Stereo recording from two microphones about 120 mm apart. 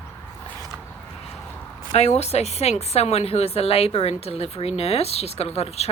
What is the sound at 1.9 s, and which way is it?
A woman's voice, 65° left (ahead or behind).